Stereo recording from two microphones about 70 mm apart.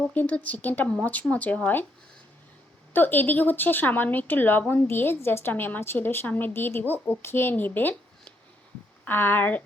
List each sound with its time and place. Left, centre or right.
0.1 s speech: left
2.9 s a woman's voice: left
7.5 s speech: left
9.0 s speech: left